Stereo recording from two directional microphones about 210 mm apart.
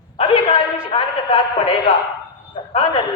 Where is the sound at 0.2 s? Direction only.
25° left (ahead or behind).